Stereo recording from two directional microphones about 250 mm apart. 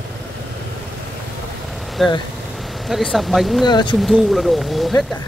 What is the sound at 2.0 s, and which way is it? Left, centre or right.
Speech, centre.